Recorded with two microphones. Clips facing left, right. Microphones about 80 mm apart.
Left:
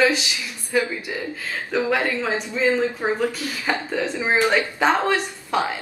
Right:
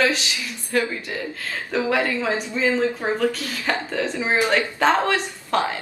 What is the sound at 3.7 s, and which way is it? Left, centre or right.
A woman's voice, centre.